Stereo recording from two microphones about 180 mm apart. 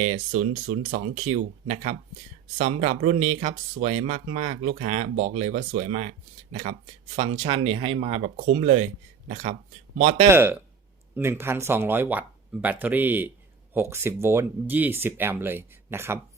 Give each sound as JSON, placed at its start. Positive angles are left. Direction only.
{"t": 0.1, "sound": "speech", "side_deg": -40}
{"t": 10.3, "sound": "speech", "side_deg": -15}